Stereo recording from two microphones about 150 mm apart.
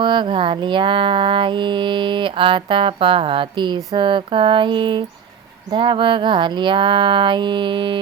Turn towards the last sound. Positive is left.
turn(degrees=-35)  # may be behind; listen again after turning